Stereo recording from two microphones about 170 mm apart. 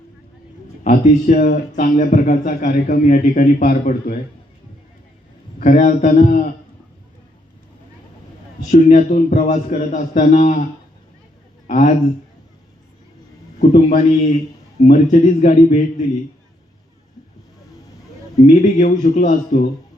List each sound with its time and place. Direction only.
0.9 s speech: 55° left (ahead or behind)
5.5 s speech: 50° left (ahead or behind)
8.7 s speech: 45° left (ahead or behind)
11.7 s speech: 50° left (ahead or behind)
13.6 s speech: 45° left (ahead or behind)
18.4 s speech: 45° left (ahead or behind)